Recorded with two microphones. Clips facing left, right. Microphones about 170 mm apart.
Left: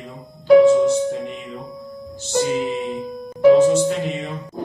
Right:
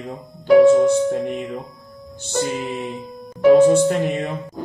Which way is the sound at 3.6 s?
55° right (ahead or behind).